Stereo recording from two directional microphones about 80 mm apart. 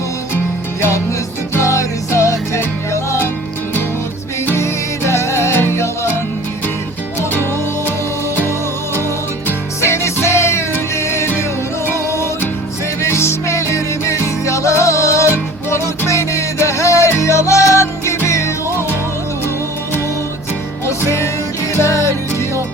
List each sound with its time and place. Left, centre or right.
0.8 s music: left
4.4 s music: left
9.5 s music: left
20.8 s music: left